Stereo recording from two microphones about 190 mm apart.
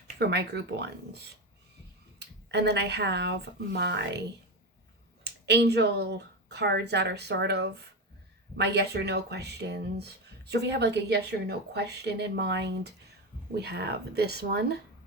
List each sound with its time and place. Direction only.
0.2 s speech: 60° right (ahead or behind)
5.2 s speech: 60° right (ahead or behind)